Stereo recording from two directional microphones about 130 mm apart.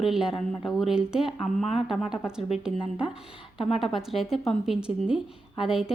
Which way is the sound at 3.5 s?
45° left (ahead or behind).